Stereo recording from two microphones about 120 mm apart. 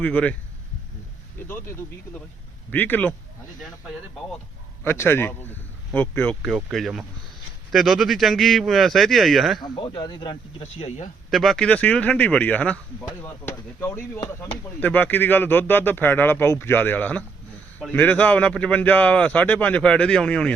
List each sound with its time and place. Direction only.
0.0 s speech: 10° left (ahead or behind)
1.5 s speech: 15° left (ahead or behind)
3.6 s a man's voice: centre (ahead or behind)
4.8 s speech: 20° left (ahead or behind)
6.7 s a man's voice: centre (ahead or behind)
9.7 s speech: 40° left (ahead or behind)
10.6 s speech: 60° left (ahead or behind)
11.3 s speech: centre (ahead or behind)